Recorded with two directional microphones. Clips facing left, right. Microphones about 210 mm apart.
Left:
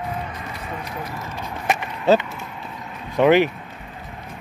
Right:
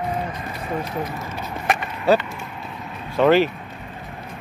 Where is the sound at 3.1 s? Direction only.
15° left (ahead or behind).